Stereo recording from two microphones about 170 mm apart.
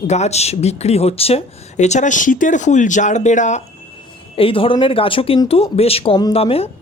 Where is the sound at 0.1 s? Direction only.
40° left (ahead or behind).